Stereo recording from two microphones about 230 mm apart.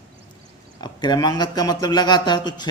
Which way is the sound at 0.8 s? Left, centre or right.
Centre.